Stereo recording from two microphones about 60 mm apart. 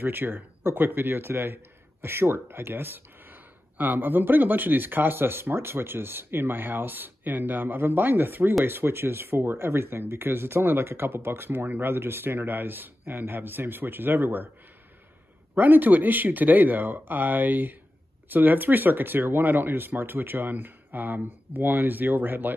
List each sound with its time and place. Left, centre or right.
0.0 s speech: right
15.5 s speech: right